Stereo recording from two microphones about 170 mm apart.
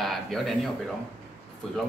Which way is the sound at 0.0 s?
Centre (ahead or behind).